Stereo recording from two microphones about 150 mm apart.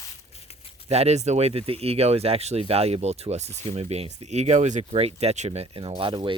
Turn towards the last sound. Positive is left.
turn(degrees=-30)  # may be behind; listen again after turning